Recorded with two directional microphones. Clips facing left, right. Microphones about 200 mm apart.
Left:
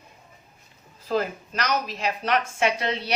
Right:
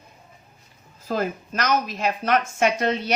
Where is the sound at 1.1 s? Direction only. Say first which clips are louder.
Even; 45° right (ahead or behind).